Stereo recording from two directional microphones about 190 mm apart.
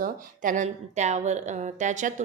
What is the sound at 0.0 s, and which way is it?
Speech, 40° right (ahead or behind).